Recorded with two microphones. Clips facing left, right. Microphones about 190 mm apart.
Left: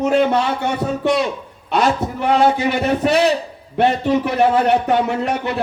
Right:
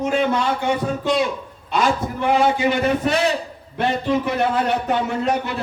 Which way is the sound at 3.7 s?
65° left (ahead or behind).